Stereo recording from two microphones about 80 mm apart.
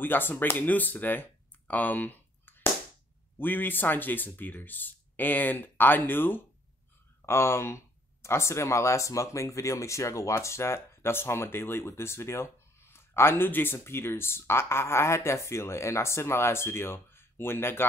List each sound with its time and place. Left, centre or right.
0.0 s speech: left